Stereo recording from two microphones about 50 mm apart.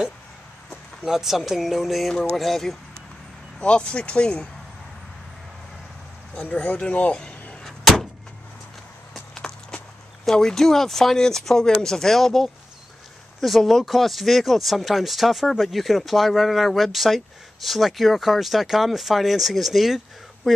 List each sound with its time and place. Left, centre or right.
1.0 s speech: centre
3.5 s speech: left
6.8 s speech: left
7.6 s vehicle: centre
9.3 s walk: centre
10.3 s speech: centre